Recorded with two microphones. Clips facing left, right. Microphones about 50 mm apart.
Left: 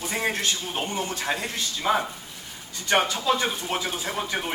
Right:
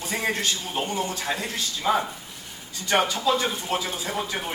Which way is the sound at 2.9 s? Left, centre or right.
Left.